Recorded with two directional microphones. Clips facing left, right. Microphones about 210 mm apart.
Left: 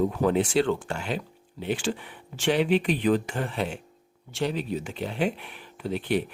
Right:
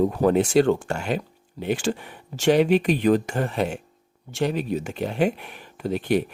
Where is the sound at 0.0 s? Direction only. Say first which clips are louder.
Right 4 dB; 40° right (ahead or behind).